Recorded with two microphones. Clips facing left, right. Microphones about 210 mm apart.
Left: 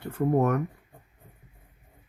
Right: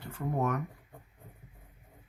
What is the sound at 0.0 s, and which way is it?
Speech, 55° left (ahead or behind).